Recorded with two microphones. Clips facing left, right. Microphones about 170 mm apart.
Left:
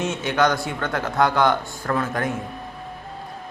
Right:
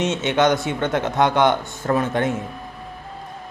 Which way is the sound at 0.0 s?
20° right (ahead or behind).